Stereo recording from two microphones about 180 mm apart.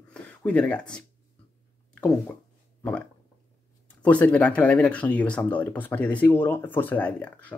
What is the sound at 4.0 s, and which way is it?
Speech, 5° left (ahead or behind).